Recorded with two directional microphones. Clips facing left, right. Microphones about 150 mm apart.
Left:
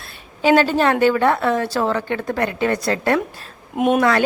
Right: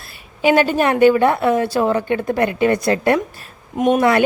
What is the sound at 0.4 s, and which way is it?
A woman's voice, 15° right (ahead or behind).